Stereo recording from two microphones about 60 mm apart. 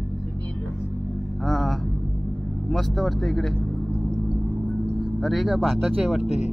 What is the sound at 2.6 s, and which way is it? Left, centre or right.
Speech, centre.